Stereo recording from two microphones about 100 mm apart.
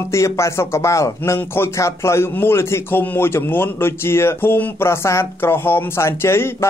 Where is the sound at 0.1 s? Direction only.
30° left (ahead or behind).